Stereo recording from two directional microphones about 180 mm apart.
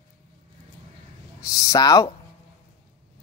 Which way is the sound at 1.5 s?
20° left (ahead or behind).